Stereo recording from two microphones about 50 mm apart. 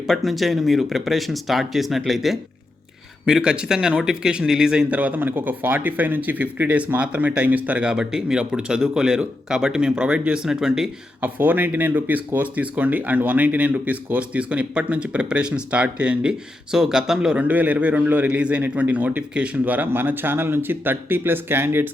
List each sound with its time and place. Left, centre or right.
0.1 s speech: centre
3.2 s speech: centre
4.9 s speech: right
7.9 s speech: centre
11.2 s speech: right; by 17.3 s centre
17.3 s speech: right
19.6 s speech: right